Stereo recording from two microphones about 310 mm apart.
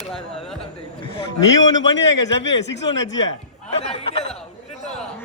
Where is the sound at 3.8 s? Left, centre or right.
Centre.